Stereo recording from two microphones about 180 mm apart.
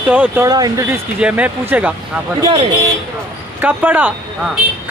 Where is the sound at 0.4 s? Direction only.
20° right (ahead or behind).